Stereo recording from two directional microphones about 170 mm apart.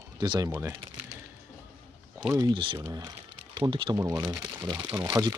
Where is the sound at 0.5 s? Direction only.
10° right (ahead or behind).